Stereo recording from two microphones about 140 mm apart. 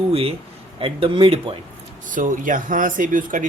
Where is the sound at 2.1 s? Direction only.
70° right (ahead or behind).